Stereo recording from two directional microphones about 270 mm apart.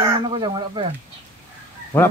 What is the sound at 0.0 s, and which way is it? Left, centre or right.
Speech, centre.